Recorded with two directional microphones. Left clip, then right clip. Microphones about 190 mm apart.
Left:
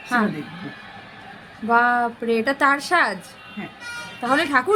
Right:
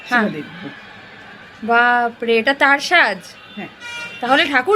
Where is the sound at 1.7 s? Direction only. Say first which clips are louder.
Right 4 dB; centre (ahead or behind).